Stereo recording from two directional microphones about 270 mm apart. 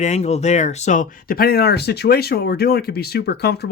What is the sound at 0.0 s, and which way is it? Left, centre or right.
Speech, left.